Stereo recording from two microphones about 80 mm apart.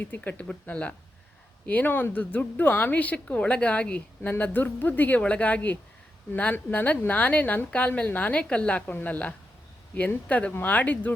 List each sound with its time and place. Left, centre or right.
0.0 s speech: left